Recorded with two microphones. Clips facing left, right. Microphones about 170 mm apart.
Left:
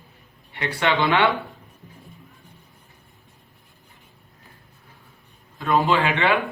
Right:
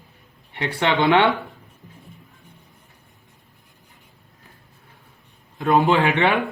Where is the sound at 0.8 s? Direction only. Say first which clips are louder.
Right 3 dB; 20° right (ahead or behind).